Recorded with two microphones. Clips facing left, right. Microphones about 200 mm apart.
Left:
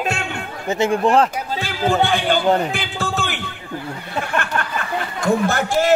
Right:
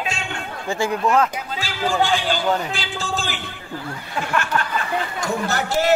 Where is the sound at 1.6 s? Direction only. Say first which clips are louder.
Left 3 dB; 60° left (ahead or behind).